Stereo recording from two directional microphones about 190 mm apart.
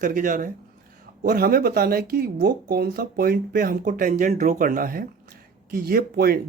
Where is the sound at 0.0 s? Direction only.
45° right (ahead or behind).